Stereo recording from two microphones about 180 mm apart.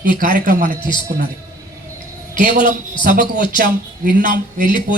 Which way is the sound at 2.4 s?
45° right (ahead or behind).